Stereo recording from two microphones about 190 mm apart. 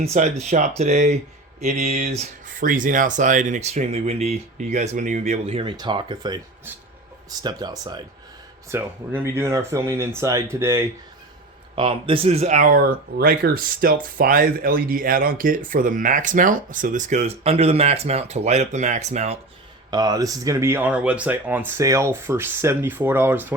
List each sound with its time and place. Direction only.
0.0 s speech: 35° right (ahead or behind); by 10.8 s 15° right (ahead or behind)
11.7 s speech: 30° right (ahead or behind)
19.9 s speech: 20° right (ahead or behind)